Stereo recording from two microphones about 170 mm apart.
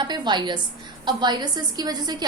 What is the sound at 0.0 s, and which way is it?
A woman's voice, 25° right (ahead or behind).